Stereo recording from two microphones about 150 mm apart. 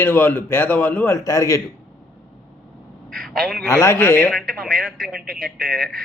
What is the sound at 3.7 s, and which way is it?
Speech, 20° left (ahead or behind).